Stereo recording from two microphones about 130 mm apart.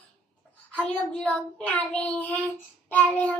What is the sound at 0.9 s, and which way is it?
Child singing, 10° left (ahead or behind).